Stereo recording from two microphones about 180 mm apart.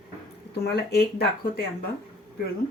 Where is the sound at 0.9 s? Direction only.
60° left (ahead or behind).